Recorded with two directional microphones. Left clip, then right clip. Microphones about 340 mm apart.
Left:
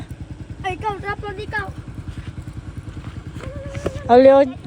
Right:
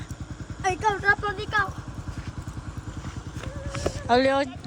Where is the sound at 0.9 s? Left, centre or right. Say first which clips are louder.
Right 3 dB; right.